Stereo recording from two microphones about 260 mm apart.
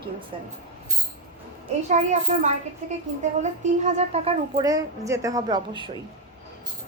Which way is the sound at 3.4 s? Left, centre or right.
Right.